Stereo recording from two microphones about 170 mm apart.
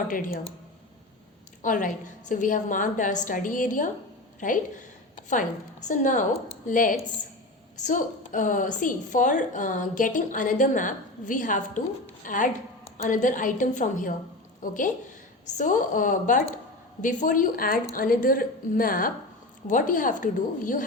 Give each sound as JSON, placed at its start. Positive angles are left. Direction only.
{"t": 0.1, "sound": "a woman's voice", "side_deg": 50}
{"t": 1.6, "sound": "a woman's voice", "side_deg": 50}